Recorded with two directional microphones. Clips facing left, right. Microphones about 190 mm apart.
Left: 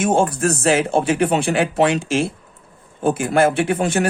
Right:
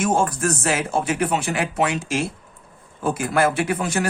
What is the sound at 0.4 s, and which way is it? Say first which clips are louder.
Speech: left 5 dB; 30° left (ahead or behind).